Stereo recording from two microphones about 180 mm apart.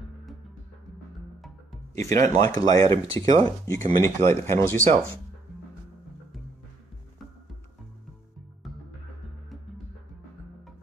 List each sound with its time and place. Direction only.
2.0 s speech: 15° left (ahead or behind)